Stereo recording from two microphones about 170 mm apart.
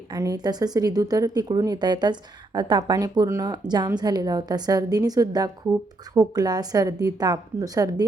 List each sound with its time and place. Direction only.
0.1 s a woman's voice: 20° right (ahead or behind)